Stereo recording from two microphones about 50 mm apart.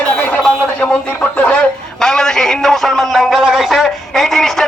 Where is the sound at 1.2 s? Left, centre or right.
Left.